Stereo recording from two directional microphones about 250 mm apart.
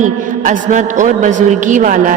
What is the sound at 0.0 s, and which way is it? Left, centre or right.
A woman's voice, right.